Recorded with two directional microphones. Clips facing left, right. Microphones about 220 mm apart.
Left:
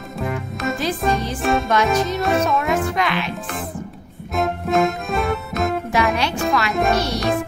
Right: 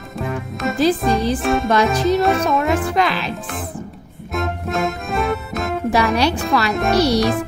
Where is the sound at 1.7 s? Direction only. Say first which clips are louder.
Right 3 dB; 35° right (ahead or behind).